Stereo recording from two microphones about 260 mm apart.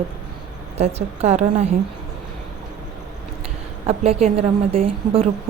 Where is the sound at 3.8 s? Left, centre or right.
Right.